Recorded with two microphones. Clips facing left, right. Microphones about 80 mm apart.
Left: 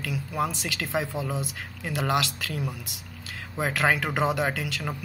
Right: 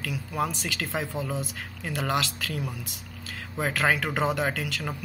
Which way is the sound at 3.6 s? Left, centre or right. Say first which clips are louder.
Left 1 dB; centre.